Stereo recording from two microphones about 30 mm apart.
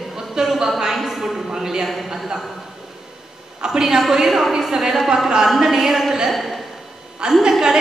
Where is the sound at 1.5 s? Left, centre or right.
Right.